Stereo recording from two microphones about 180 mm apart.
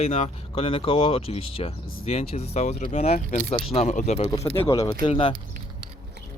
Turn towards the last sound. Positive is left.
turn(degrees=25)  # may be behind; listen again after turning